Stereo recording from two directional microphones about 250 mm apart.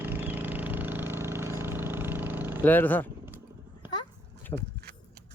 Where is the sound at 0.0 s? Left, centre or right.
Centre.